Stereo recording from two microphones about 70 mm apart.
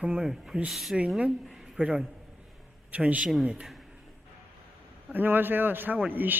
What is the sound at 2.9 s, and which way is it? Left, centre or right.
Speech, right.